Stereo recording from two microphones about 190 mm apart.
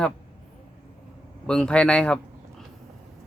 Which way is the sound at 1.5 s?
5° left (ahead or behind).